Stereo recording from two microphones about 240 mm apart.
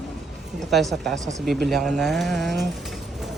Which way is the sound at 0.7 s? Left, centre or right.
Centre.